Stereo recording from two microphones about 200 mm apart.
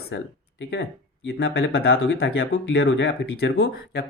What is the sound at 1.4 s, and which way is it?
Speech, 55° left (ahead or behind).